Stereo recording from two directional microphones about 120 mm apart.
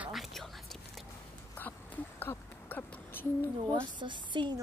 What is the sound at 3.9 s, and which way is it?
Speech, 40° right (ahead or behind).